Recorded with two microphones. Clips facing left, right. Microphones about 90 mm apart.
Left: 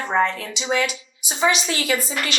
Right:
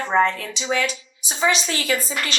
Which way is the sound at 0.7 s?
30° left (ahead or behind).